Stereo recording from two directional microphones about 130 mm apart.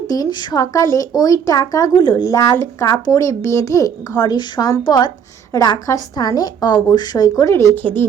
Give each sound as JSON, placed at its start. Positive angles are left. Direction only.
{"t": 0.1, "sound": "speech", "side_deg": 30}